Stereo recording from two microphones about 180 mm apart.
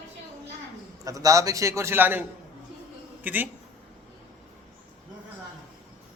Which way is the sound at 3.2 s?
10° right (ahead or behind).